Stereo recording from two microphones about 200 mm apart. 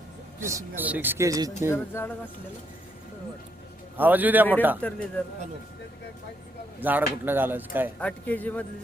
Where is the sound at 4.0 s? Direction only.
10° right (ahead or behind).